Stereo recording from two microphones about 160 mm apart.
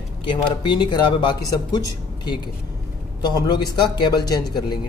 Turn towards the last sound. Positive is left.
turn(degrees=25)  # may be behind; listen again after turning